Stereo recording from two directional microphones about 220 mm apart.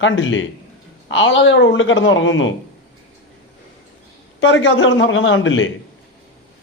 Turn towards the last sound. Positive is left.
turn(degrees=60)  # may be behind; listen again after turning